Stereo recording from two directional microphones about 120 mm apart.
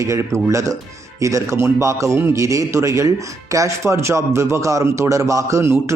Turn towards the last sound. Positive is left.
turn(degrees=-20)  # may be behind; listen again after turning